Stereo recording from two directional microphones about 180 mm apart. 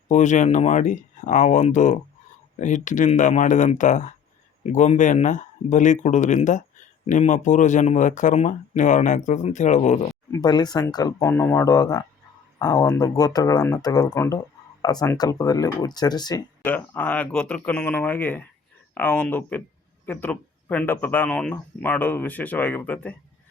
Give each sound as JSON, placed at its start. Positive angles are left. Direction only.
{"t": 0.1, "sound": "speech", "side_deg": 40}
{"t": 10.3, "sound": "speech", "side_deg": 20}
{"t": 16.6, "sound": "speech", "side_deg": 10}